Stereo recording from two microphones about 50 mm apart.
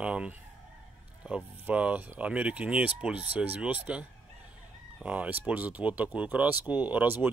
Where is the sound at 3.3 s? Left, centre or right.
Right.